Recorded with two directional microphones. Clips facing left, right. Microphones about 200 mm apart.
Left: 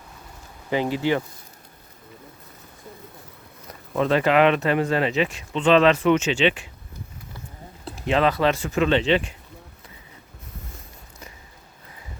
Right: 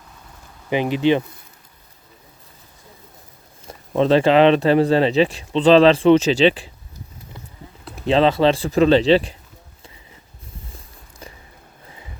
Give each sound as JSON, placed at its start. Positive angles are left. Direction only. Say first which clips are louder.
{"t": 0.7, "sound": "speech", "louder": "right 5 dB", "side_deg": -20}
{"t": 3.7, "sound": "speech", "louder": "right 5 dB", "side_deg": -30}
{"t": 8.0, "sound": "speech", "louder": "right 5 dB", "side_deg": -30}